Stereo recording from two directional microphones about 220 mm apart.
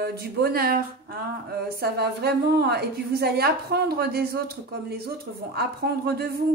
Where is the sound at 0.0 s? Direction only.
45° right (ahead or behind).